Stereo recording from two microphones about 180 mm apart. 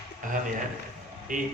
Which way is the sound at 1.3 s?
50° right (ahead or behind).